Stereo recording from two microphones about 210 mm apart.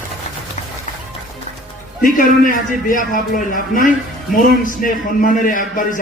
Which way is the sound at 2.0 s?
40° left (ahead or behind).